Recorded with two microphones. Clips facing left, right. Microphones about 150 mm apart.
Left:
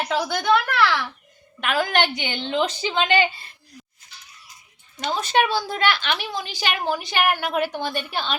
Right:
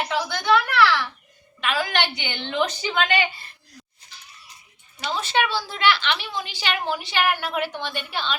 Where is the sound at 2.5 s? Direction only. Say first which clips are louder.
Left 1 dB; 30° left (ahead or behind).